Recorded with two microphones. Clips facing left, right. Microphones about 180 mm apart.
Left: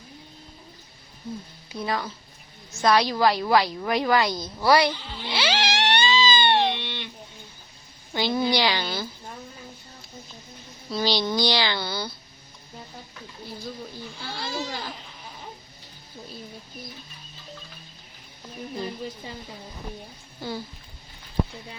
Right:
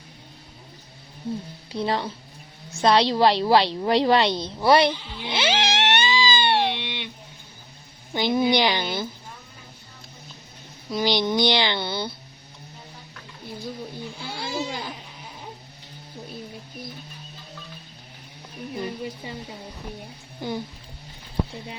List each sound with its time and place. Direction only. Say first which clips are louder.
1.7 s a woman's voice: right 3 dB; 30° right (ahead or behind)
8.1 s a woman's voice: right 3 dB; 20° right (ahead or behind)
10.9 s a woman's voice: right 2 dB; 20° right (ahead or behind)
14.3 s speech: right 2 dB; 10° right (ahead or behind)
20.4 s a woman's voice: right 3 dB; 20° right (ahead or behind)